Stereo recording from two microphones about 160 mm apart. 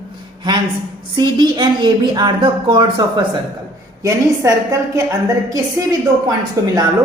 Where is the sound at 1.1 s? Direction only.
30° right (ahead or behind).